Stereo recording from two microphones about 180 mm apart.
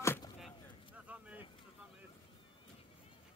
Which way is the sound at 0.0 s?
15° left (ahead or behind).